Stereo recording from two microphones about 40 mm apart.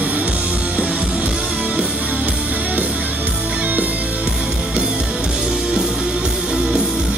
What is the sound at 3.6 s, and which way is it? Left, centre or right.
Music, right.